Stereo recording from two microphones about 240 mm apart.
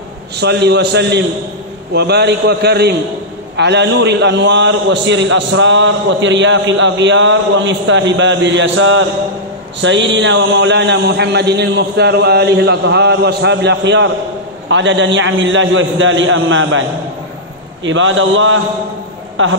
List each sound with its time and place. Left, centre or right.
0.4 s a man's voice: right
17.8 s a man's voice: right